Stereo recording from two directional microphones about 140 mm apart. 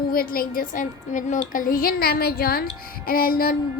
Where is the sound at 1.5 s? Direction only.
80° left.